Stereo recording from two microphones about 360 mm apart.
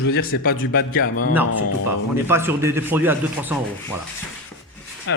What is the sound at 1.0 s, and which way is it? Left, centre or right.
Speech, left.